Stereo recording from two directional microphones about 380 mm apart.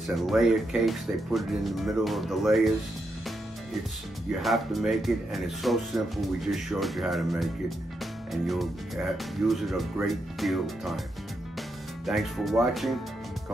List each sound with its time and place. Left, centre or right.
0.1 s speech: centre
4.3 s speech: centre
12.1 s speech: centre